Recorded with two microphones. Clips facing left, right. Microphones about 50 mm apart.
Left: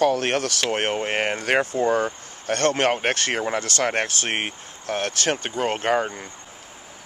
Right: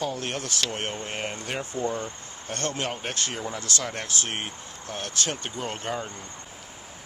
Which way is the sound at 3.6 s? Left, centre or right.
Left.